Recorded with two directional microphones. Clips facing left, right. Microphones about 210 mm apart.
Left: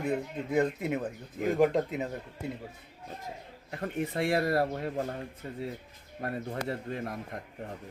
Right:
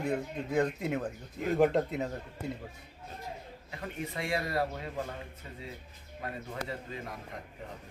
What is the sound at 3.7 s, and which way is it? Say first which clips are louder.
Speech: left 6 dB; 50° left (ahead or behind).